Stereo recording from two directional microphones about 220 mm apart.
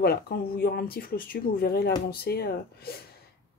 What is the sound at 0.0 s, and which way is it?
Speech, 45° left (ahead or behind).